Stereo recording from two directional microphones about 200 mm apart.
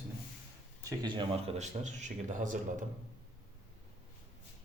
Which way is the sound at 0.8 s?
20° right (ahead or behind).